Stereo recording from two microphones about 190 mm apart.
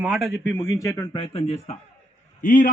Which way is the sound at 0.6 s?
15° left (ahead or behind).